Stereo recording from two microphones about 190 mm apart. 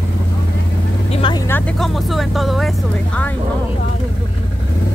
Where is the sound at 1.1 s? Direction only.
25° left (ahead or behind).